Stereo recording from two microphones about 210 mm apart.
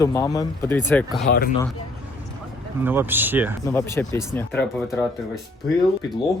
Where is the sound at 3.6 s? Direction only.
10° left (ahead or behind).